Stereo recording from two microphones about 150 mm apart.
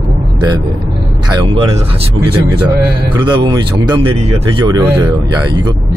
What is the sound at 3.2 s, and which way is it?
Speech, 30° right (ahead or behind).